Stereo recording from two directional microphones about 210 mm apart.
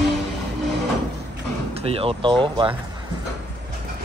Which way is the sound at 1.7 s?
30° right (ahead or behind).